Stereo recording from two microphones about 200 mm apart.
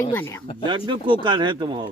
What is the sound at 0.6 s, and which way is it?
Speech, 25° right (ahead or behind).